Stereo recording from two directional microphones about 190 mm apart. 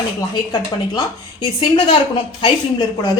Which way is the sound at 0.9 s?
25° left (ahead or behind).